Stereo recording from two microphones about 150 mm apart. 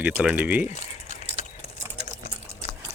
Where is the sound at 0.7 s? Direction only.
50° left (ahead or behind).